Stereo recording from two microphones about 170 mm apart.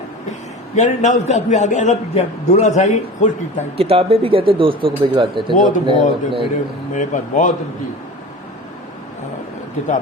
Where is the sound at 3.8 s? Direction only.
35° right (ahead or behind).